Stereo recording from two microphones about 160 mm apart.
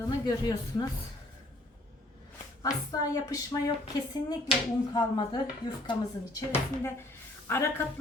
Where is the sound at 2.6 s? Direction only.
25° left (ahead or behind).